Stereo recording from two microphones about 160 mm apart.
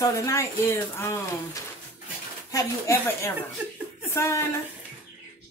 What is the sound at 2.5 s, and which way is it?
A woman's voice, 20° left (ahead or behind).